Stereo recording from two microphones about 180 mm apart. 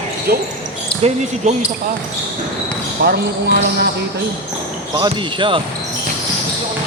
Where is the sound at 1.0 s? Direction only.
40° right (ahead or behind).